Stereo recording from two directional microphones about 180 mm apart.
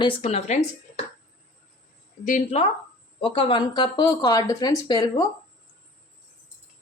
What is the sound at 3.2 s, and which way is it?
Speech, 30° left (ahead or behind).